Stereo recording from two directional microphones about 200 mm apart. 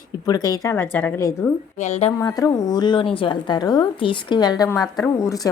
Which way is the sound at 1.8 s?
35° left (ahead or behind).